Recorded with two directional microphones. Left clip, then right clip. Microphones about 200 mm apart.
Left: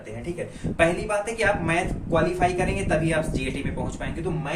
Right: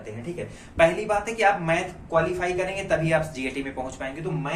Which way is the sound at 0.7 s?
20° right (ahead or behind).